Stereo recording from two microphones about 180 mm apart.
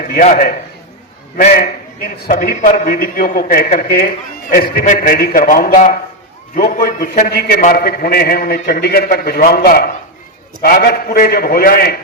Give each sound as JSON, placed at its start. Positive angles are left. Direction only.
{"t": 0.3, "sound": "a man's voice", "side_deg": 50}